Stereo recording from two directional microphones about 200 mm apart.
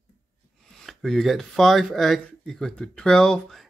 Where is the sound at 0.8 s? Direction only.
Centre (ahead or behind).